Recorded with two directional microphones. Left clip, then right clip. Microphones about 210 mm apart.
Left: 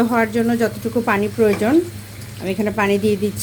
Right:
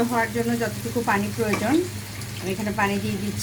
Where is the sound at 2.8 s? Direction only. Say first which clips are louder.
Left 5 dB; 40° left (ahead or behind).